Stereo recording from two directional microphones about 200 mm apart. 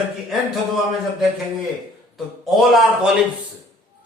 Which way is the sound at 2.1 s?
Centre (ahead or behind).